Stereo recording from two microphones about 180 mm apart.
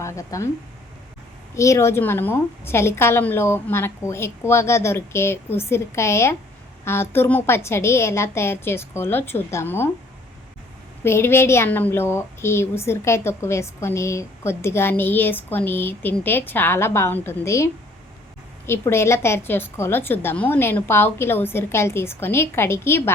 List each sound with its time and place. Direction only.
0.0 s speech: 15° left (ahead or behind)
1.5 s a woman's voice: 15° left (ahead or behind)
11.0 s a woman's voice: 15° left (ahead or behind)